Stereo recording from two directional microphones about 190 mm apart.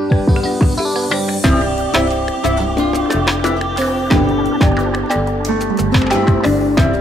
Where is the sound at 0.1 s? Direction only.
Centre (ahead or behind).